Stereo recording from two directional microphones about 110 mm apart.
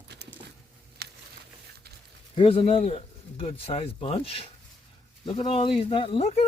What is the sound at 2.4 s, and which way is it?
Speech, 60° left (ahead or behind).